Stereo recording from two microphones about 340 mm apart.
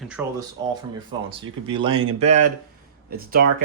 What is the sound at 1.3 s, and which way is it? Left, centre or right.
Speech, centre.